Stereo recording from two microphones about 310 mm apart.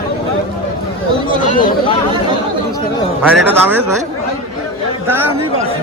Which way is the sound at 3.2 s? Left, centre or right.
Centre.